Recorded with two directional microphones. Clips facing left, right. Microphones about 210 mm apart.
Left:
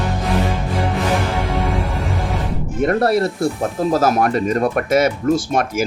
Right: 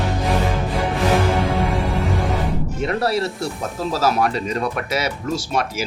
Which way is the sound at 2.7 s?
50° left (ahead or behind).